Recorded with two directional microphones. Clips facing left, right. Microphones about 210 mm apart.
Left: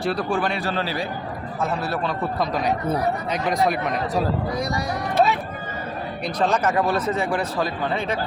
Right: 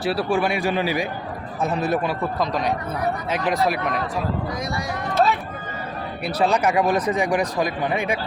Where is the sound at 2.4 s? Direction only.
Centre (ahead or behind).